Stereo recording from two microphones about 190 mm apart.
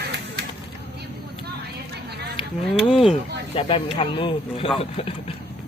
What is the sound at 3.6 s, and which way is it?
Speech, 30° left (ahead or behind).